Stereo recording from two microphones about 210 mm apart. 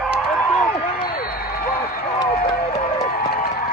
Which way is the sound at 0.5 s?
40° left (ahead or behind).